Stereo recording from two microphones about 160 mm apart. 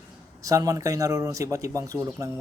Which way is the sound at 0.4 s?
20° right (ahead or behind).